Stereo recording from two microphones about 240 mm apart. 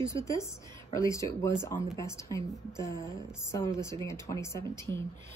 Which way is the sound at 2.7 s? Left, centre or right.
Centre.